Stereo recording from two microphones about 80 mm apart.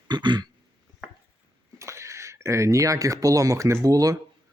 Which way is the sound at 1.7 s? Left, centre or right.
Right.